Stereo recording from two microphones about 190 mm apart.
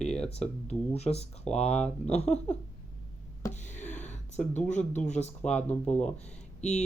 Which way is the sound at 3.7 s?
40° left (ahead or behind).